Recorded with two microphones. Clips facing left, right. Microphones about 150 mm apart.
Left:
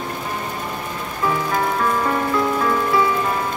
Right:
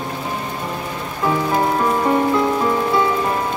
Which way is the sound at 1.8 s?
20° right (ahead or behind).